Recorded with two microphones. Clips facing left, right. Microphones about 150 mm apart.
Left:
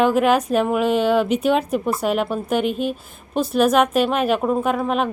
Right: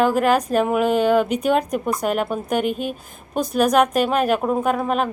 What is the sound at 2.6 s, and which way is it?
Speech, 50° right (ahead or behind).